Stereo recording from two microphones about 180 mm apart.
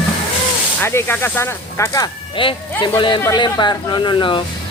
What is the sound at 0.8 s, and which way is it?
Speech, 15° left (ahead or behind).